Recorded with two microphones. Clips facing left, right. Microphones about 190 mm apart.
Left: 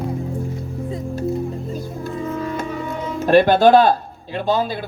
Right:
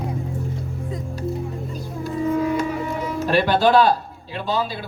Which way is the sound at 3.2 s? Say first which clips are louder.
Left 6 dB; 50° left (ahead or behind).